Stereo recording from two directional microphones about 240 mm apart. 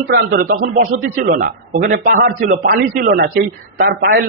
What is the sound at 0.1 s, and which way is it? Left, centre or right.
A man's voice, right.